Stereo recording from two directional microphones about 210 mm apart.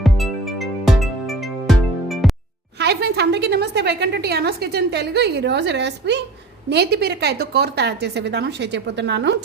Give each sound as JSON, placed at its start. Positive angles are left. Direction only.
{"t": 0.0, "sound": "music", "side_deg": 0}
{"t": 2.7, "sound": "a woman's voice", "side_deg": -50}